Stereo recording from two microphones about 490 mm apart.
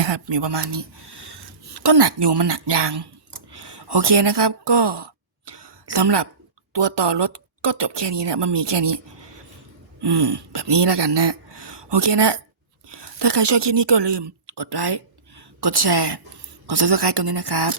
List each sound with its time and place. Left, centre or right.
0.0 s speech: right
10.0 s speech: right